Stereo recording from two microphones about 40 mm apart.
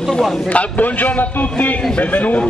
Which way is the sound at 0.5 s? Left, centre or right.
Left.